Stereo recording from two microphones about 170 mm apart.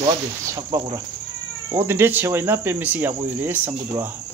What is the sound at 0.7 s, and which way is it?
Speech, 20° right (ahead or behind).